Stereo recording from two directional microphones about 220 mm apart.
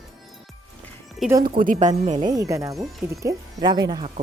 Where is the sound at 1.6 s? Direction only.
35° right (ahead or behind).